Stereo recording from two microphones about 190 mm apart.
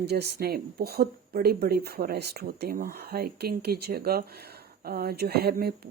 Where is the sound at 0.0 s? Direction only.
55° right (ahead or behind).